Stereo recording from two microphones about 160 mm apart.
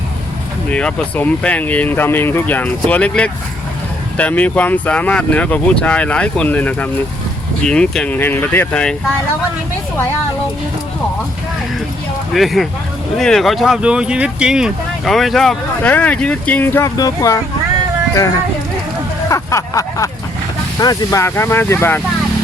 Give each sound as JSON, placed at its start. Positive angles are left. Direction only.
{"t": 0.7, "sound": "speech", "side_deg": 5}
{"t": 12.3, "sound": "speech", "side_deg": 0}
{"t": 19.3, "sound": "a sound", "side_deg": 20}
{"t": 20.7, "sound": "speech", "side_deg": 25}